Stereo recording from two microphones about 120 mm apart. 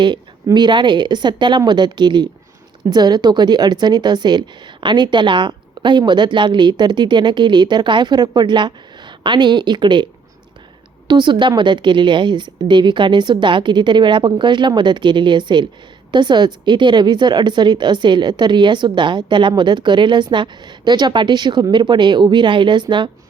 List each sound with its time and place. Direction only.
0.5 s a woman's voice: 40° right (ahead or behind)
11.1 s a woman's voice: 40° right (ahead or behind)